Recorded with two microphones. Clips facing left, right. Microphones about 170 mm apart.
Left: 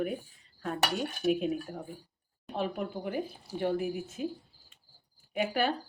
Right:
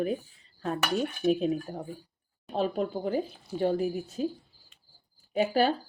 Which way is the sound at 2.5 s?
30° right (ahead or behind).